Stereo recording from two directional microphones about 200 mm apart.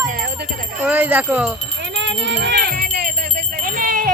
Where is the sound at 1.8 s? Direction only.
60° right (ahead or behind).